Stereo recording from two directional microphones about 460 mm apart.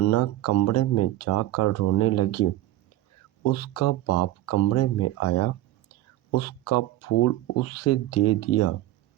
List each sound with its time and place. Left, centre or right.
0.0 s speech: left